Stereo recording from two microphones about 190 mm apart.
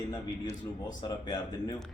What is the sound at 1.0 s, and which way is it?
Speech, 20° left (ahead or behind).